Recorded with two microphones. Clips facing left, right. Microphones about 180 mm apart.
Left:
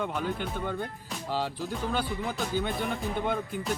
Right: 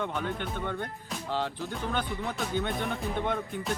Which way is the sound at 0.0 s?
5° left (ahead or behind).